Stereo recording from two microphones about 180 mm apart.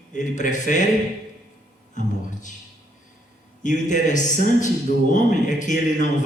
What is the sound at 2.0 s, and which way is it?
Speech, 45° left (ahead or behind).